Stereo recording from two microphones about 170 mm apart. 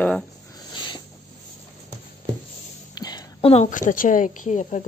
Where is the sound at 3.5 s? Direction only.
50° left (ahead or behind).